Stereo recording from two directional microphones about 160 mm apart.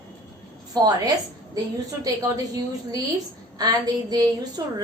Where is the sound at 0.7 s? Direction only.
25° right (ahead or behind).